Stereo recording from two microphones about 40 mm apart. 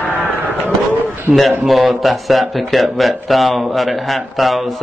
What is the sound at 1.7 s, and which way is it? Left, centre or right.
Speech, centre.